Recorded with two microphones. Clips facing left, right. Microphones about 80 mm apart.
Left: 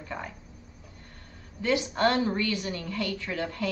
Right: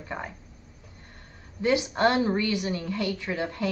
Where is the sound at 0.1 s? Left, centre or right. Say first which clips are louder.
Right 2 dB; centre.